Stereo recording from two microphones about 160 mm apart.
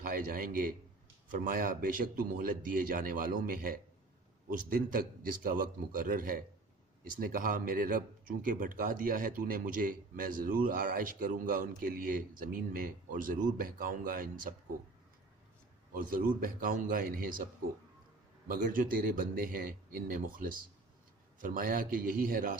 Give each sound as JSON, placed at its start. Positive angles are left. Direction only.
{"t": 0.0, "sound": "a man's voice", "side_deg": -65}
{"t": 15.9, "sound": "speech", "side_deg": -60}
{"t": 18.4, "sound": "speech", "side_deg": -60}